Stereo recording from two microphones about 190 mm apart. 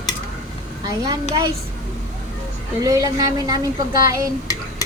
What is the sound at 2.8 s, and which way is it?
Speech, 20° right (ahead or behind).